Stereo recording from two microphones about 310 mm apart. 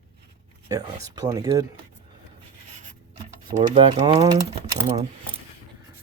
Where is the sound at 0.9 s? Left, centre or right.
Centre.